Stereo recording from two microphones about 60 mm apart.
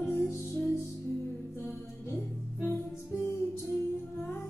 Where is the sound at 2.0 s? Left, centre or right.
Left.